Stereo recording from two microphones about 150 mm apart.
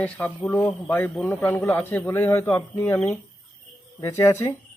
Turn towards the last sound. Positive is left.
turn(degrees=20)  # may be behind; listen again after turning